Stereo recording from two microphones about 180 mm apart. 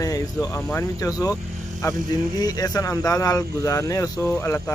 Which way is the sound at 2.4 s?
20° left (ahead or behind).